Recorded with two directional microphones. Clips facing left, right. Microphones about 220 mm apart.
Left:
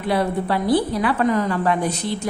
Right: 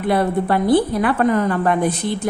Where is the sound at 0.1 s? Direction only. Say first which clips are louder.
Right 3 dB; 50° right (ahead or behind).